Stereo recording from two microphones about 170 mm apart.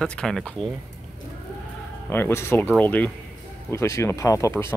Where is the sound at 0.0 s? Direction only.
5° left (ahead or behind).